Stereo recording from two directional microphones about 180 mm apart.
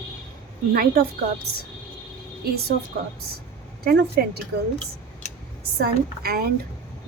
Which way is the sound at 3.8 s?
60° right (ahead or behind).